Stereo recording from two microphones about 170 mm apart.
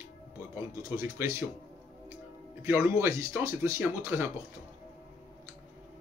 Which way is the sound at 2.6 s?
15° right (ahead or behind).